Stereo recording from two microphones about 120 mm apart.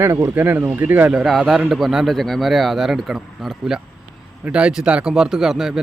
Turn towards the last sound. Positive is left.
turn(degrees=-5)  # may be behind; listen again after turning